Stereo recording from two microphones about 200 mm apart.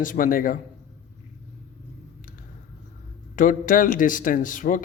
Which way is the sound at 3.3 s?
40° left (ahead or behind).